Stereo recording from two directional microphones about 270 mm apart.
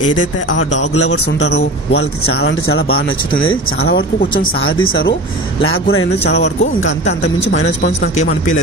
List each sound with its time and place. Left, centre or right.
0.1 s speech: left